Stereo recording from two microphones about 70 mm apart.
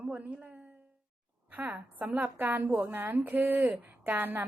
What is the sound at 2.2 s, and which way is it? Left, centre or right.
A woman's voice, right.